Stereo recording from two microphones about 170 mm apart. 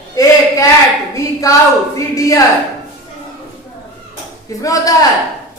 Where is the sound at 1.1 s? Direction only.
20° left (ahead or behind).